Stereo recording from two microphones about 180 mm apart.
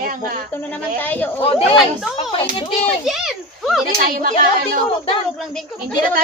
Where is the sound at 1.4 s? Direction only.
35° left (ahead or behind).